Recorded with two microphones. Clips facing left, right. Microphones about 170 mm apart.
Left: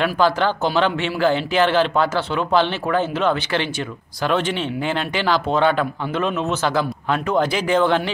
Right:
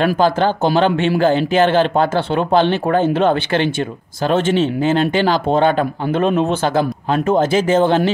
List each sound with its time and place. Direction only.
0.0 s speech: 45° right (ahead or behind)